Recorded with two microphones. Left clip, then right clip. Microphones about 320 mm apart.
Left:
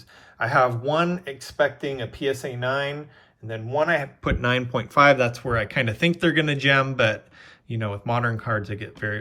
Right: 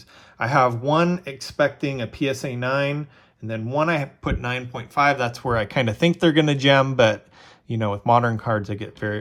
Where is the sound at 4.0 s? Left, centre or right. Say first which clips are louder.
Left 2 dB; centre.